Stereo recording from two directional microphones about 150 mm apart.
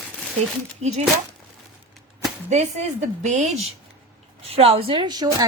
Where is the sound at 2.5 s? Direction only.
50° right (ahead or behind).